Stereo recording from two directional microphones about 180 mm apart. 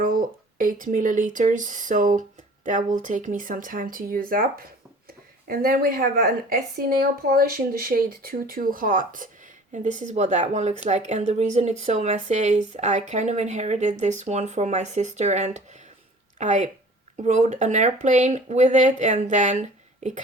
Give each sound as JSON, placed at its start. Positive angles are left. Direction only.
{"t": 0.0, "sound": "a woman's voice", "side_deg": -50}